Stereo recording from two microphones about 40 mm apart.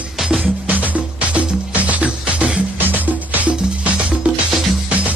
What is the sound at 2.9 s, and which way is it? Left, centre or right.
Music, right.